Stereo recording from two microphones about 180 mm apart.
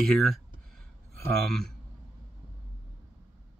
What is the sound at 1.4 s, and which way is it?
Speech, centre (ahead or behind).